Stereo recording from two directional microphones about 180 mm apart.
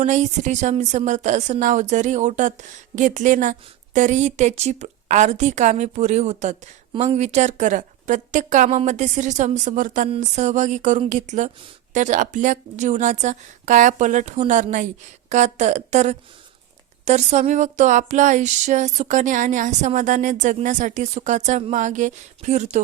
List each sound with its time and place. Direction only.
0.0 s a woman's voice: 40° right (ahead or behind)